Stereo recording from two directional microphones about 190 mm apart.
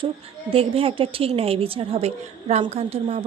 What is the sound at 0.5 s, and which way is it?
A woman's voice, 30° right (ahead or behind).